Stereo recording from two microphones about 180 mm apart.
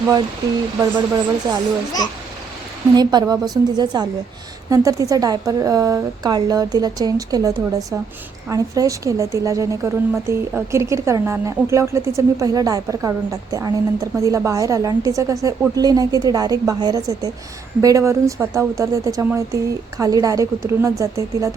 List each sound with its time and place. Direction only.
0.8 s speech: 20° right (ahead or behind)
2.9 s a woman's voice: 25° right (ahead or behind)